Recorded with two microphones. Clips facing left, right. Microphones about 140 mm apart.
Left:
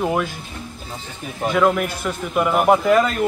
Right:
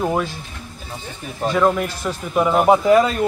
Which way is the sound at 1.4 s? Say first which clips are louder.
Even; 5° left (ahead or behind).